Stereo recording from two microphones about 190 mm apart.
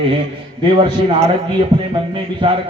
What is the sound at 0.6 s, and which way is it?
Speech, 25° right (ahead or behind).